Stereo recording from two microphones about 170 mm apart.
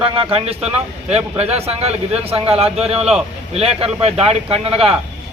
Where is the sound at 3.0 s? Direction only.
5° right (ahead or behind).